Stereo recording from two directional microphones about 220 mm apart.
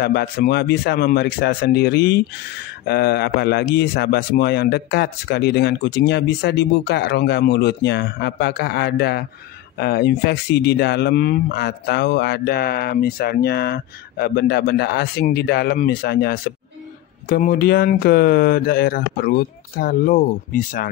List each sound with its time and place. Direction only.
0.0 s speech: 45° left (ahead or behind)